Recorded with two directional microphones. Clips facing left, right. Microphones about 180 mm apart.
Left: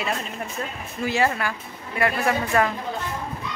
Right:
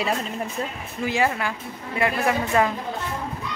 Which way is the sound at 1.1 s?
15° right (ahead or behind).